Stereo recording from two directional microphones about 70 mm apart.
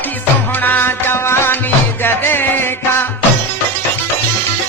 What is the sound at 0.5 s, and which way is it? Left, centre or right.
Music, left.